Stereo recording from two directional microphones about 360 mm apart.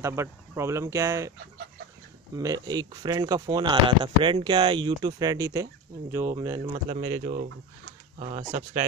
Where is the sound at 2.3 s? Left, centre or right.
Centre.